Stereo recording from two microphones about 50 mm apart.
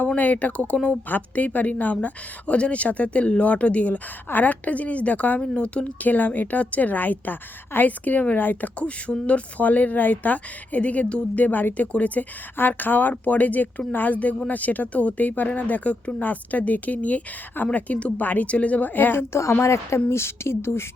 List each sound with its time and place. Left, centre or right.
0.2 s a woman's voice: left
12.5 s a woman's voice: left
19.1 s speech: left
20.1 s speech: left